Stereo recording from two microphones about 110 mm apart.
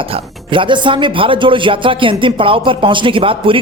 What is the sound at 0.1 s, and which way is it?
Speech, 50° right (ahead or behind).